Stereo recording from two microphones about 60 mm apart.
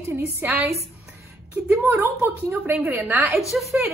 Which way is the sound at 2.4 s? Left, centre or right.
Right.